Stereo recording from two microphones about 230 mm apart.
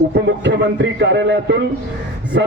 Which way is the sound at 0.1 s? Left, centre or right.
Right.